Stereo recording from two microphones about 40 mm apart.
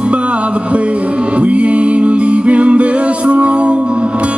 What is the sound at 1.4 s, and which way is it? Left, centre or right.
Music, right.